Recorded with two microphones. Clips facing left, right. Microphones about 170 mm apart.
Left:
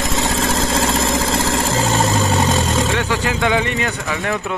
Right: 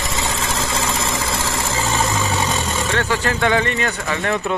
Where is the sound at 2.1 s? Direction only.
35° left (ahead or behind).